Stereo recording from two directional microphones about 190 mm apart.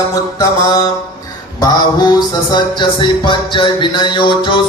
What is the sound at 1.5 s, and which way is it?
Speech, 20° left (ahead or behind).